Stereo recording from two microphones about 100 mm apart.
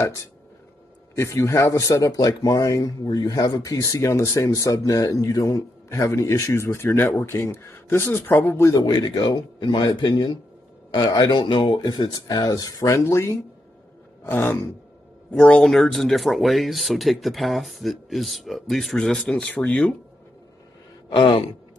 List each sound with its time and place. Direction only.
0.0 s speech: 30° left (ahead or behind)
8.7 s speech: 45° left (ahead or behind); by 13.4 s 25° left (ahead or behind)
14.2 s a sound: 20° left (ahead or behind)
15.3 s speech: 5° left (ahead or behind)
21.1 s sigh: 60° left (ahead or behind)